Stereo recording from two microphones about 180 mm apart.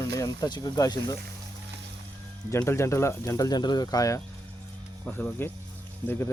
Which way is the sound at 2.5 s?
15° left (ahead or behind).